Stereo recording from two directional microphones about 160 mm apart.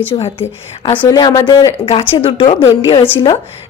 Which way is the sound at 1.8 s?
35° left (ahead or behind).